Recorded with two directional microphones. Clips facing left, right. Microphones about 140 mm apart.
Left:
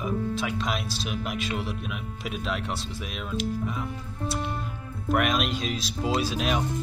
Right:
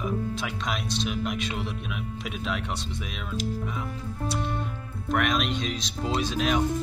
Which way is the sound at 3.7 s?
Centre (ahead or behind).